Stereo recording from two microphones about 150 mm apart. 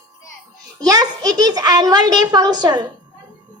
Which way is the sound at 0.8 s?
25° right (ahead or behind).